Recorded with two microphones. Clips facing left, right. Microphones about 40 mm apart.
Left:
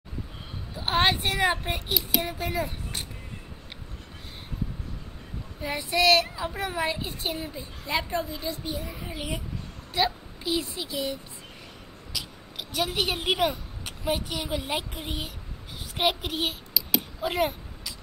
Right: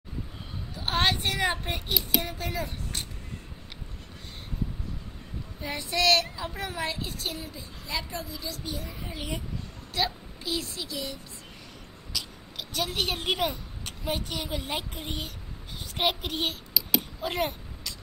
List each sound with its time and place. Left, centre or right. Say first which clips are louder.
0.7 s a child's voice: left 3 dB; centre
5.6 s a child's voice: left 3 dB; centre